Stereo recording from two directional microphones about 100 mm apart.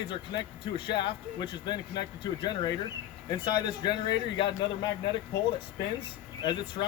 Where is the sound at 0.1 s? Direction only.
55° left (ahead or behind).